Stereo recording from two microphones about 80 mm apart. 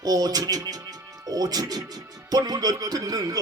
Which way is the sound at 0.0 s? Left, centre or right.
Right.